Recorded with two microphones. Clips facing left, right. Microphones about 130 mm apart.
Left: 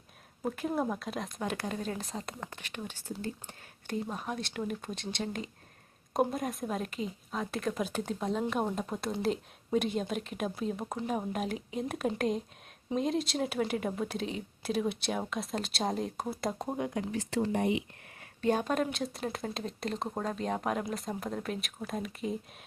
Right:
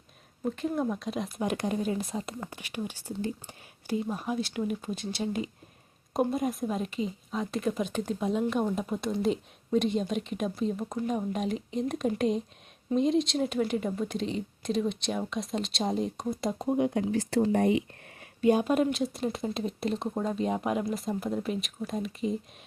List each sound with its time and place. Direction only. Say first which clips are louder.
0.4 s speech: right 2 dB; 5° left (ahead or behind)
1.4 s speech: right 7 dB; 15° right (ahead or behind); by 16.7 s centre (ahead or behind)
16.7 s speech: right 7 dB; 20° right (ahead or behind)
17.1 s speech: right 5 dB; 35° right (ahead or behind)
18.3 s speech: right 5 dB; 10° right (ahead or behind)